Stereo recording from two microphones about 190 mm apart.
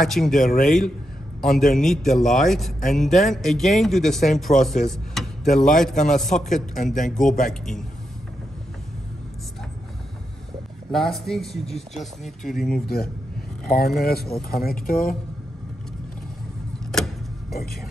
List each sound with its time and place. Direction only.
0.0 s a man's voice: centre (ahead or behind)
0.4 s speech: 45° left (ahead or behind)
0.7 s a man's voice: centre (ahead or behind)
6.8 s speech: 40° left (ahead or behind)
7.1 s a man's voice: centre (ahead or behind)
10.9 s a man's voice: centre (ahead or behind)
12.7 s speech: 55° left (ahead or behind)
16.9 s a sound: centre (ahead or behind)